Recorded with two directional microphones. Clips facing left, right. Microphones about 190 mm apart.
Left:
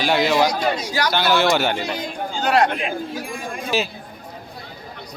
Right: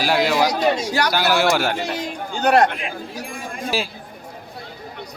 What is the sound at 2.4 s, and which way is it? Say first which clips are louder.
Speech: right 2 dB; 55° right (ahead or behind).